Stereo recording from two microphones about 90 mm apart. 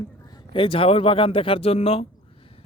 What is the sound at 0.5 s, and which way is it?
Speech, 85° left.